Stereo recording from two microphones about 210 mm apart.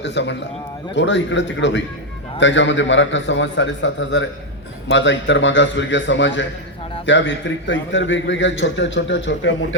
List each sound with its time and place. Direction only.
0.0 s a man's voice: 55° left (ahead or behind)